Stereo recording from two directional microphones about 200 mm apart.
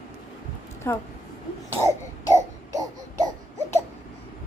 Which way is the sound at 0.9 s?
15° left (ahead or behind).